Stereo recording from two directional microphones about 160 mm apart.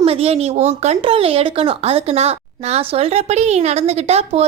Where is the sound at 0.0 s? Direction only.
40° right (ahead or behind).